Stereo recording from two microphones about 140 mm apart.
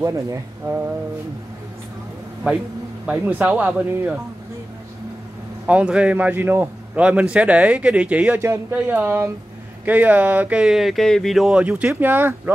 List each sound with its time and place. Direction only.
0.0 s speech: 20° right (ahead or behind)
2.4 s a man's voice: 10° right (ahead or behind)
5.7 s a man's voice: 10° right (ahead or behind)